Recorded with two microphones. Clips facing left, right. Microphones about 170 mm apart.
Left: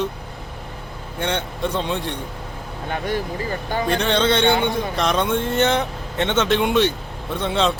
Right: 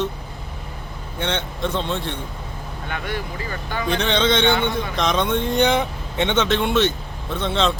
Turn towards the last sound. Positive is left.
turn(degrees=10)  # may be behind; listen again after turning